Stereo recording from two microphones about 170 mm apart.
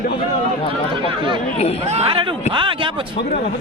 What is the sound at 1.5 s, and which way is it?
Speech, 40° left (ahead or behind).